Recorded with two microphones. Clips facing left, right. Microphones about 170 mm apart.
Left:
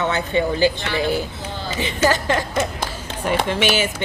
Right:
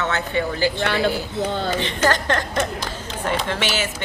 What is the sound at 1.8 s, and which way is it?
A man's voice, 10° left (ahead or behind).